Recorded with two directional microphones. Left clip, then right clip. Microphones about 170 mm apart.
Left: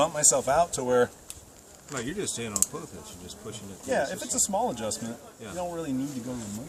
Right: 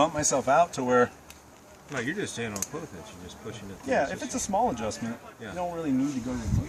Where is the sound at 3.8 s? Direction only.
10° left (ahead or behind).